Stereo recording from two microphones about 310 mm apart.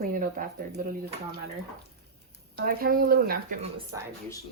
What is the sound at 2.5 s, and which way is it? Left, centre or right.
A woman's voice, right.